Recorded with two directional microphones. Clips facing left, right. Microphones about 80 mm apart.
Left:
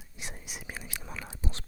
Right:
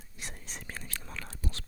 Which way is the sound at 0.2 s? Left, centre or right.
Centre.